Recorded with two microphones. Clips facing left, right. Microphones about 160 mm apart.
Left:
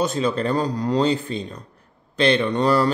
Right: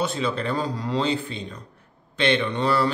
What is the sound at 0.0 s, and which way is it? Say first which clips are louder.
Speech: left 4 dB; 40° left (ahead or behind).